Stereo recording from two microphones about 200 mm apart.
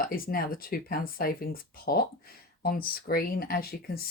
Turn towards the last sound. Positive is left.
turn(degrees=50)  # may be behind; listen again after turning